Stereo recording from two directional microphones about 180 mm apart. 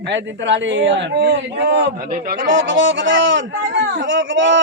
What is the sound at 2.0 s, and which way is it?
Speech, 45° right (ahead or behind).